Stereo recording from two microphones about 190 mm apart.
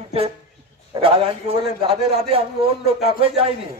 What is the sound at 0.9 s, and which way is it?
Speech, 30° right (ahead or behind).